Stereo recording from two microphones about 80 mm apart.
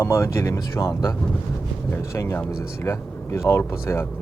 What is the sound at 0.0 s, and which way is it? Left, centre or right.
Speech, left.